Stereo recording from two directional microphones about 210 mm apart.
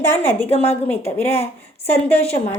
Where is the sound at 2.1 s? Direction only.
30° left (ahead or behind).